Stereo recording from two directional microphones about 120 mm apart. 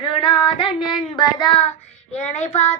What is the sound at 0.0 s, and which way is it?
Female singing, 45° left (ahead or behind).